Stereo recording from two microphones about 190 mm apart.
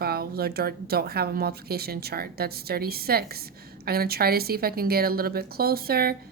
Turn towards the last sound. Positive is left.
turn(degrees=-55)  # may be behind; listen again after turning